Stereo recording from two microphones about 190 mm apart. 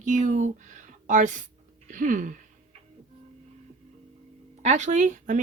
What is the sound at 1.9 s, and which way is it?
Sneeze, 45° right (ahead or behind).